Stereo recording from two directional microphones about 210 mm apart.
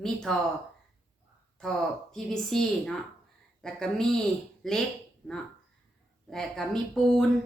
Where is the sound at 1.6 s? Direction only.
Centre (ahead or behind).